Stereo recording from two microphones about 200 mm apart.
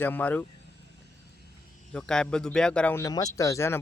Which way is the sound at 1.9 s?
5° left (ahead or behind).